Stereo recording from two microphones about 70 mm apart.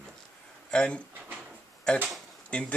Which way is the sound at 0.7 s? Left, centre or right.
Centre.